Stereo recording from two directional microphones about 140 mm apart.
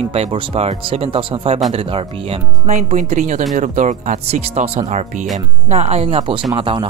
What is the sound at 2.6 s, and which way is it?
Speech, 55° right (ahead or behind).